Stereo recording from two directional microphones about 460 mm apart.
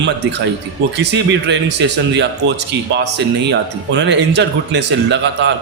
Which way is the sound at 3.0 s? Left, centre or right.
Right.